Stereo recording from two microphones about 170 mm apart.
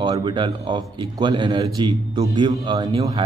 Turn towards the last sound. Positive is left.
turn(degrees=-20)  # may be behind; listen again after turning